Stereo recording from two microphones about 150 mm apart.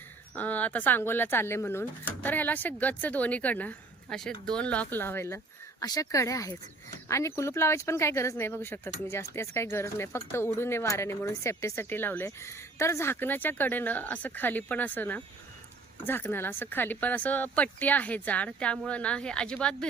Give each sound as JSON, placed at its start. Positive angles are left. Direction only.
{"t": 0.3, "sound": "speech", "side_deg": 10}